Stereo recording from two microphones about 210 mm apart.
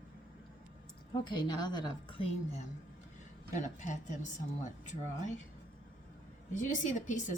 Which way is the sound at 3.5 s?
35° left (ahead or behind).